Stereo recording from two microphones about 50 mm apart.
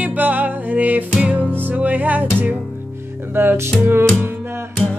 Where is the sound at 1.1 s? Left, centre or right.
Right.